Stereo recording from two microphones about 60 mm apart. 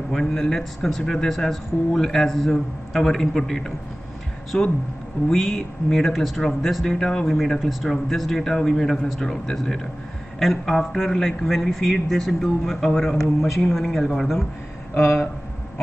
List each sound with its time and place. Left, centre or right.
0.1 s a man's voice: centre